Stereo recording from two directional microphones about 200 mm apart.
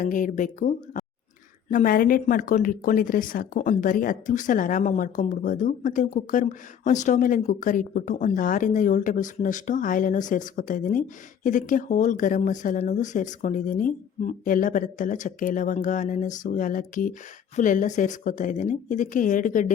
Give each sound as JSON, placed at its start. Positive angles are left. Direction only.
{"t": 0.0, "sound": "speech", "side_deg": 40}